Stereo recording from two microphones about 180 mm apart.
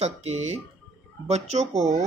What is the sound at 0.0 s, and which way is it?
Speech, 35° right (ahead or behind).